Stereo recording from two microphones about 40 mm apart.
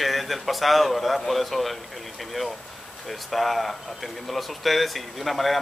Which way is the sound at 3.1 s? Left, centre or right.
Centre.